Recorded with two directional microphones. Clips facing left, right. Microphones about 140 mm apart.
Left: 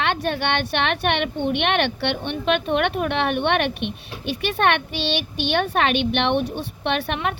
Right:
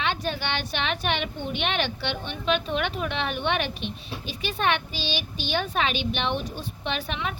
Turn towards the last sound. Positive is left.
turn(degrees=60)  # may be behind; listen again after turning